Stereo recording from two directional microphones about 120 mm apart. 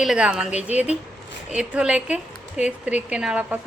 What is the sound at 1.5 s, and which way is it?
A woman's voice, 10° right (ahead or behind).